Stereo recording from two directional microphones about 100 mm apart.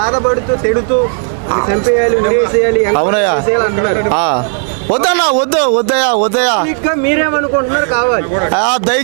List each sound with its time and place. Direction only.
1.5 s a man's voice: 25° right (ahead or behind)